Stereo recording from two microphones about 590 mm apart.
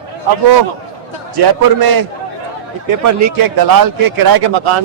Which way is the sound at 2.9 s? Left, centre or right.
Right.